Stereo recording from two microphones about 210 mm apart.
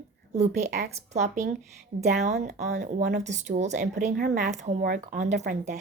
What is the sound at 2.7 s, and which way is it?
Speech, 50° right (ahead or behind).